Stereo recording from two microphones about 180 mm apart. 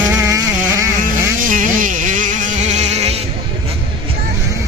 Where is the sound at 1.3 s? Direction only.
45° right (ahead or behind).